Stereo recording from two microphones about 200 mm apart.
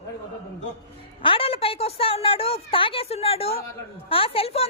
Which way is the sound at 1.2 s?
25° left (ahead or behind).